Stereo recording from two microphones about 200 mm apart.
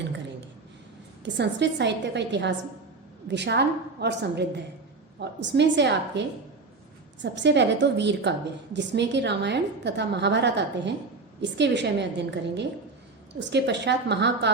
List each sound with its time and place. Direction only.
1.2 s a woman's voice: 60° right (ahead or behind)